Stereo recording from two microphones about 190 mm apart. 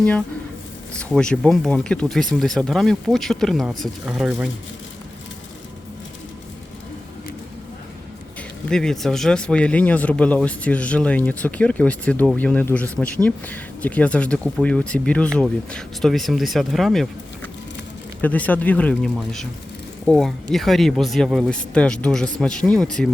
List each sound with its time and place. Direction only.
0.9 s speech: 5° left (ahead or behind)
8.4 s speech: 5° left (ahead or behind)